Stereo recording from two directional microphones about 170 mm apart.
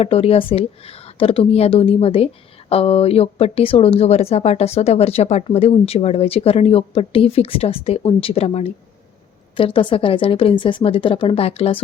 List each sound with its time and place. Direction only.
0.0 s speech: 35° left (ahead or behind)